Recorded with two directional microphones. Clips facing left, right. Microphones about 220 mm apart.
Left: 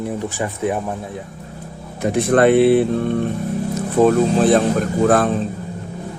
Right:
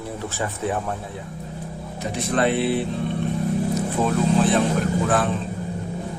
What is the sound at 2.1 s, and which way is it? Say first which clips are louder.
Speech: left 9 dB; 55° left (ahead or behind).